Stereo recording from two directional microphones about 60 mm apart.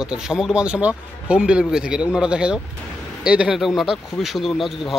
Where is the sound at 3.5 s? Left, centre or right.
Centre.